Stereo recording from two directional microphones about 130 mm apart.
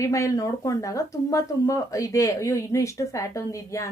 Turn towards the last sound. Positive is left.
turn(degrees=25)  # may be behind; listen again after turning